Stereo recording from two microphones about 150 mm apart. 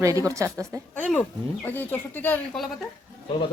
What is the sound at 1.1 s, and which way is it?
Speech, 10° left (ahead or behind).